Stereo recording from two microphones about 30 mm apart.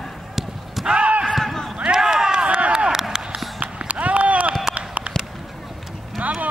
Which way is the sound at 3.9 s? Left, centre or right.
Right.